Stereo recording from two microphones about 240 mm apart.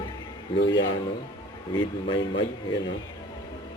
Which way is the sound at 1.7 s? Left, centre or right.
Left.